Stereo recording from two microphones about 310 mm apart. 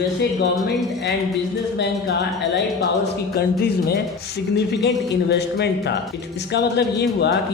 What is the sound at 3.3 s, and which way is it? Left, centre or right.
A woman's voice, left.